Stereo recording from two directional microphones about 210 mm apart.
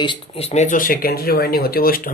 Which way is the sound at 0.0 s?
25° left (ahead or behind).